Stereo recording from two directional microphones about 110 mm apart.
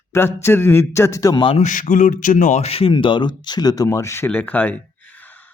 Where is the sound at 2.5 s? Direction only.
70° left (ahead or behind); by 5.4 s 15° left (ahead or behind).